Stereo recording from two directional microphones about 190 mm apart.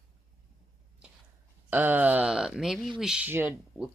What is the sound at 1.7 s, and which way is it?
Speech, 10° right (ahead or behind).